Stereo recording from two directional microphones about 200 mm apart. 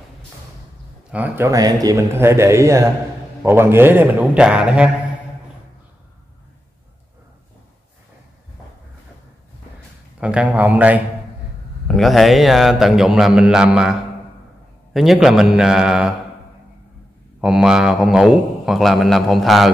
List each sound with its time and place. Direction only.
1.1 s speech: 10° right (ahead or behind)
10.2 s a man's voice: 5° right (ahead or behind)
17.4 s a man's voice: 5° right (ahead or behind)